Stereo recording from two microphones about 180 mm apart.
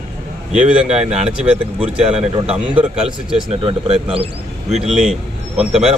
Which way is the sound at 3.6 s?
30° right (ahead or behind).